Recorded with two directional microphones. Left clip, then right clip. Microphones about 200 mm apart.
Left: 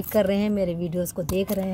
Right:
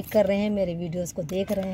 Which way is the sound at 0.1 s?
10° left (ahead or behind).